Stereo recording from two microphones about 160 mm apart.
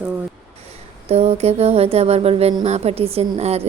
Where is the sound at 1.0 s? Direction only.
40° right (ahead or behind).